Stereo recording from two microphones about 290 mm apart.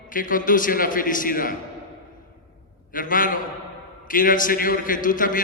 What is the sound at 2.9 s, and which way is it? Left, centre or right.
A man's voice, left.